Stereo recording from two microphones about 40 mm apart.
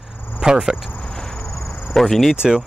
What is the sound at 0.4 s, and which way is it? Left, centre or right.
Speech, centre.